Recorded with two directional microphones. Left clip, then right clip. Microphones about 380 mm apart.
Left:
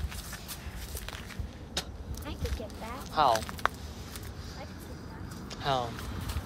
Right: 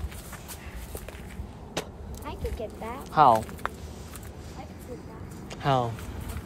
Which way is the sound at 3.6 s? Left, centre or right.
Centre.